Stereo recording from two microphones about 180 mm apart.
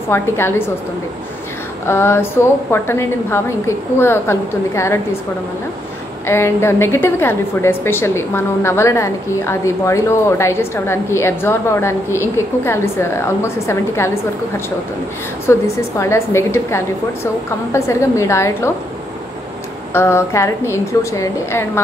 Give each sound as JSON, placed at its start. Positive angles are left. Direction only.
{"t": 0.1, "sound": "a woman's voice", "side_deg": 15}
{"t": 1.9, "sound": "a woman's voice", "side_deg": 15}
{"t": 6.2, "sound": "a woman's voice", "side_deg": 15}
{"t": 15.4, "sound": "a woman's voice", "side_deg": 15}
{"t": 19.9, "sound": "a woman's voice", "side_deg": 15}